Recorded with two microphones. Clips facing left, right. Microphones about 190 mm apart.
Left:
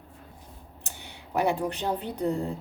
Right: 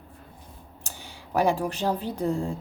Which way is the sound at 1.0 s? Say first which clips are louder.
Right 3 dB; 90° right.